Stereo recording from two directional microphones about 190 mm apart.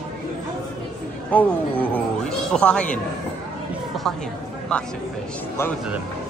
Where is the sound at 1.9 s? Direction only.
5° left (ahead or behind).